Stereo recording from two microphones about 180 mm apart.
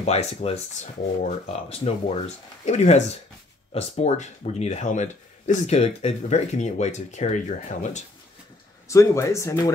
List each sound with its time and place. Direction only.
0.0 s speech: 35° left (ahead or behind)
8.8 s speech: 15° left (ahead or behind)